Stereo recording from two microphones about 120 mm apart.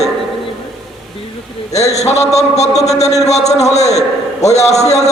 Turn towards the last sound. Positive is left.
turn(degrees=65)  # may be behind; listen again after turning